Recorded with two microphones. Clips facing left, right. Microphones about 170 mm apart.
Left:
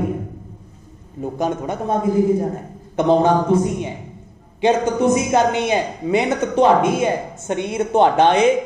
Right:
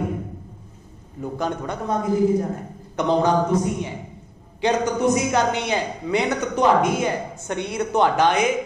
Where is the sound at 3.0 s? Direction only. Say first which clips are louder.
Left 5 dB; 25° left (ahead or behind).